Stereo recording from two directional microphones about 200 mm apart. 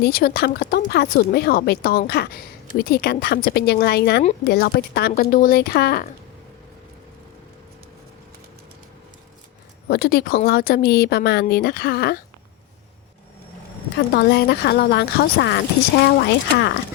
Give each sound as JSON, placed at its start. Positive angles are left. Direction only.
{"t": 0.0, "sound": "speech", "side_deg": 50}
{"t": 9.9, "sound": "speech", "side_deg": 50}
{"t": 14.1, "sound": "speech", "side_deg": 50}